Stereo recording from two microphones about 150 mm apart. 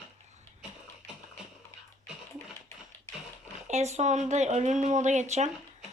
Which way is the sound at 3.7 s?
50° right (ahead or behind).